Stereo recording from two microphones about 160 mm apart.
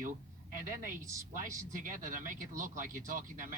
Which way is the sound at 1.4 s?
55° right (ahead or behind).